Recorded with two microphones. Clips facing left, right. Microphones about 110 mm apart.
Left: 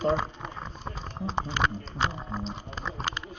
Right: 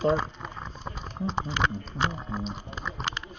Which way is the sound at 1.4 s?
20° left (ahead or behind).